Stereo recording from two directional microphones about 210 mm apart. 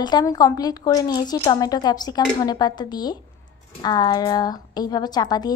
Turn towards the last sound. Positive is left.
turn(degrees=20)  # may be behind; listen again after turning